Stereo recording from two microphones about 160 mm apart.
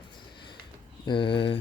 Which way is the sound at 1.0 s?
30° left (ahead or behind).